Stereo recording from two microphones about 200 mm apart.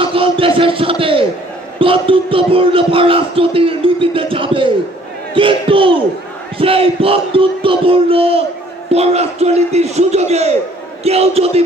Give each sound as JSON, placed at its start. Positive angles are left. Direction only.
{"t": 0.0, "sound": "a man's voice", "side_deg": -25}
{"t": 1.8, "sound": "music", "side_deg": -25}
{"t": 8.9, "sound": "a man's voice", "side_deg": -30}